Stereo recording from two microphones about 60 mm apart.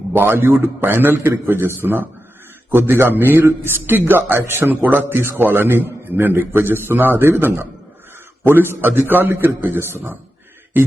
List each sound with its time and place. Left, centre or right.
0.1 s a man's voice: right
4.7 s a man's voice: right
8.8 s a man's voice: right